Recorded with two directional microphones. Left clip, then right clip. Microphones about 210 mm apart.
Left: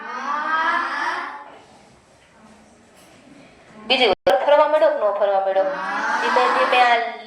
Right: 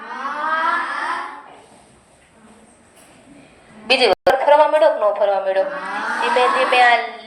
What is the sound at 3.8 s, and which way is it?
Speech, 20° right (ahead or behind).